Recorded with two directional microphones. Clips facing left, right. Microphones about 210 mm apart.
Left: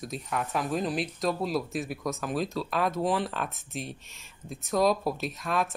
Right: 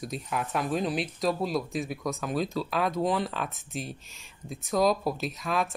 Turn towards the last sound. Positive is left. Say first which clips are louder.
# even
turn(degrees=0)  # may be behind; listen again after turning